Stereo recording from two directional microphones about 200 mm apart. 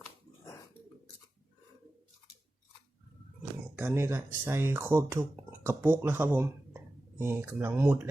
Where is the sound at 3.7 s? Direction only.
10° right (ahead or behind).